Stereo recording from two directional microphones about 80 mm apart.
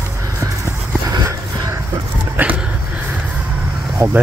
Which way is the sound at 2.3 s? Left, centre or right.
Right.